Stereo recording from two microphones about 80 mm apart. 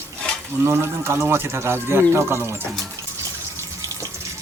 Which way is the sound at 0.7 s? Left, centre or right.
Right.